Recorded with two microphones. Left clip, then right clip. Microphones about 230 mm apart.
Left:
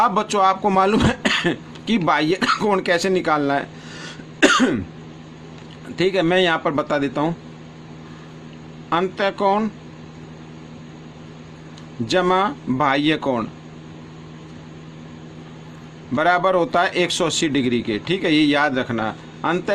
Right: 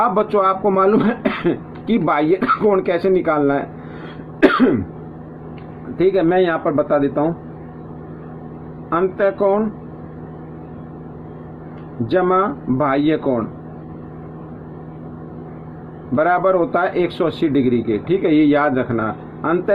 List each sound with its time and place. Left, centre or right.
0.0 s speech: left
4.4 s cough: left
6.0 s a man's voice: left
8.9 s a man's voice: left
12.0 s speech: left
16.1 s speech: left